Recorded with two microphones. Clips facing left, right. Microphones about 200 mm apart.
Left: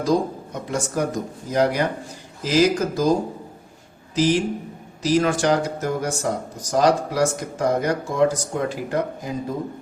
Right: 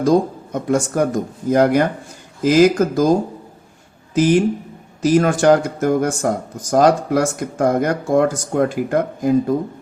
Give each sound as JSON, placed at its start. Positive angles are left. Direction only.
{"t": 0.0, "sound": "speech", "side_deg": -50}
{"t": 4.1, "sound": "speech", "side_deg": -50}